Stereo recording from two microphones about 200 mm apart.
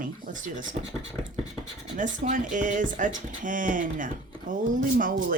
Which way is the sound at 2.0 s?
40° right (ahead or behind).